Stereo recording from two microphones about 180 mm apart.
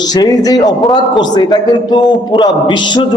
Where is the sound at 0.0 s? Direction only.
20° left (ahead or behind).